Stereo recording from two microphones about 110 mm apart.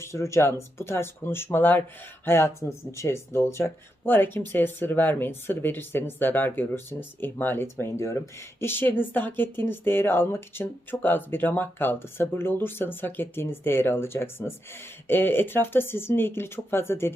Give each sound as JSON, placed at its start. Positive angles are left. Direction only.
{"t": 0.0, "sound": "speech", "side_deg": 25}